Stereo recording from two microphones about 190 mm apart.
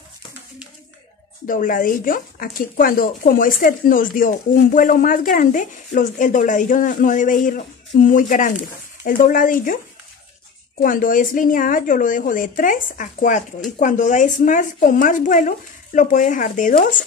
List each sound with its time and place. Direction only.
1.5 s speech: 45° left (ahead or behind)
10.8 s speech: 45° left (ahead or behind)